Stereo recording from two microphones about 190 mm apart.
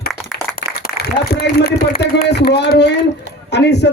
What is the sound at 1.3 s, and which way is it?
A man's voice, 55° left (ahead or behind).